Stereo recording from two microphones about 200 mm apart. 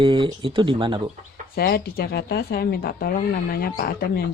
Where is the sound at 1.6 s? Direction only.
50° left (ahead or behind).